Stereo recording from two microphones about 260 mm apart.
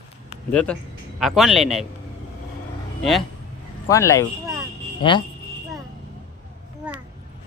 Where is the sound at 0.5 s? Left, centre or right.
Centre.